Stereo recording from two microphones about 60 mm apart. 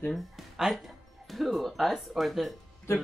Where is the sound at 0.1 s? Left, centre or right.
Centre.